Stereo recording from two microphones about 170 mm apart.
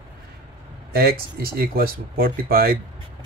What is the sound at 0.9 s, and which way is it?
Speech, 60° right (ahead or behind).